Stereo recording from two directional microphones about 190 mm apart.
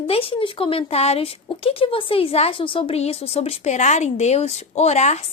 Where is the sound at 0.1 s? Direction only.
30° left (ahead or behind).